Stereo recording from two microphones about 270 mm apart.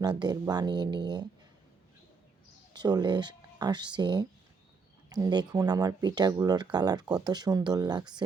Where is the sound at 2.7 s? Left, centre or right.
Centre.